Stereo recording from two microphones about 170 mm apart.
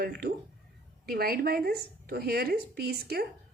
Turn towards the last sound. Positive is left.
turn(degrees=-70)  # may be behind; listen again after turning